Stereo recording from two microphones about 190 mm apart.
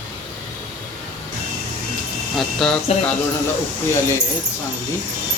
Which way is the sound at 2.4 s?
5° left (ahead or behind).